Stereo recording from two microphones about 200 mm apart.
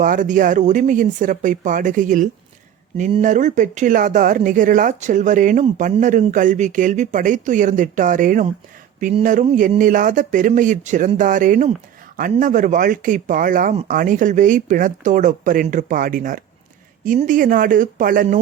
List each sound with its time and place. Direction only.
0.0 s speech: 40° right (ahead or behind)